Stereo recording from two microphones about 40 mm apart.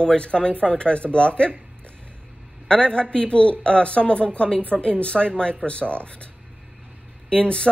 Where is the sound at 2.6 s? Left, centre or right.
Left.